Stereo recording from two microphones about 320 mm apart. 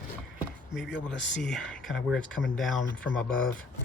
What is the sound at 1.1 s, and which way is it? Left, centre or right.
Speech, centre.